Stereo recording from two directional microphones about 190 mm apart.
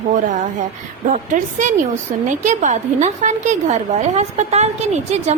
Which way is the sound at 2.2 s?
40° right (ahead or behind).